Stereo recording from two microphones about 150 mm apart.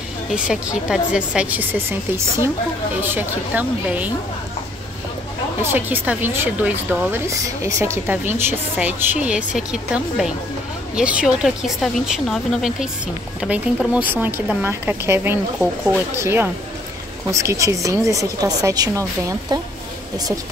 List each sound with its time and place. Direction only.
0.3 s speech: 5° right (ahead or behind)
5.6 s speech: 15° right (ahead or behind)